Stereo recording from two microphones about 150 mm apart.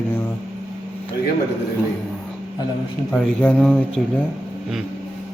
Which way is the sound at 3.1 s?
5° left (ahead or behind).